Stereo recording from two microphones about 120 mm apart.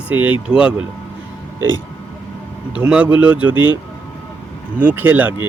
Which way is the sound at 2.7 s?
10° right (ahead or behind).